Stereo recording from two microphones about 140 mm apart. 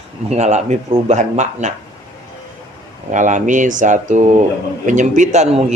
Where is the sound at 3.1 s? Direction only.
65° right (ahead or behind).